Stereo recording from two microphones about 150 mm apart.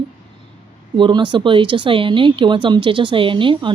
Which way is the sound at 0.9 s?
30° right (ahead or behind).